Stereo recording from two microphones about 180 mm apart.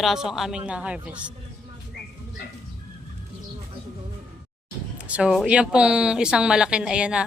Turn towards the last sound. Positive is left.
turn(degrees=-5)  # may be behind; listen again after turning